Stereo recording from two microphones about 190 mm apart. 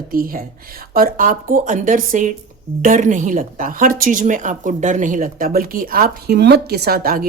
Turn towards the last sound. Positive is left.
turn(degrees=-50)  # may be behind; listen again after turning